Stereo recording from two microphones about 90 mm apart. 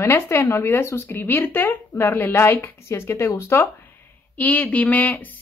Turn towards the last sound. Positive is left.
turn(degrees=20)  # may be behind; listen again after turning